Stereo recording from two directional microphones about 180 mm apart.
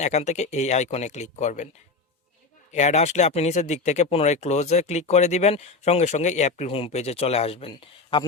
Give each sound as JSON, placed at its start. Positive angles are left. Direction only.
{"t": 0.0, "sound": "speech", "side_deg": 40}
{"t": 2.7, "sound": "speech", "side_deg": 40}